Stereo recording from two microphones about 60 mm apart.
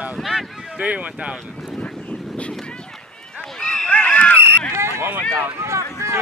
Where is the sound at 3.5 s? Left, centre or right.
Centre.